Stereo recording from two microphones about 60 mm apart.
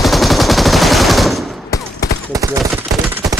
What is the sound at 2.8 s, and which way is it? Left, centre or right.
Gunshot, right.